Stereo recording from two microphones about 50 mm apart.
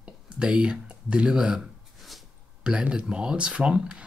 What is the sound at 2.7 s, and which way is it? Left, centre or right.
Speech, centre.